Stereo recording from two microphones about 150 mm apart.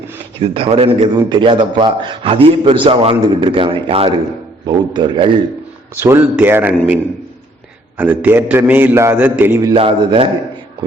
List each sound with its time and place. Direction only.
0.3 s a man's voice: 40° right (ahead or behind)
6.0 s a man's voice: 15° right (ahead or behind)
7.9 s a man's voice: 10° right (ahead or behind)
9.7 s a man's voice: 40° right (ahead or behind)